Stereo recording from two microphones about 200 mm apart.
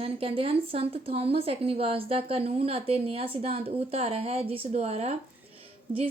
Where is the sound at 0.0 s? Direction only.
30° right (ahead or behind).